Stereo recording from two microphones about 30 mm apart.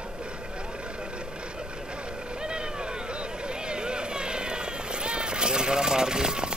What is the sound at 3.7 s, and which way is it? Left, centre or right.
Vehicle, right.